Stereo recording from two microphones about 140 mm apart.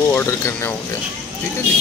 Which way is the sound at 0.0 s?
20° left (ahead or behind).